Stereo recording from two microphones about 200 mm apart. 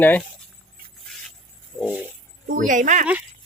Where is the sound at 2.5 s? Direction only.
40° right (ahead or behind).